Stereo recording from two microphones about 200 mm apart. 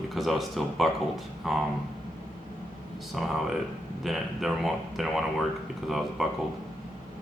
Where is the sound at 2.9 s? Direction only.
Centre (ahead or behind).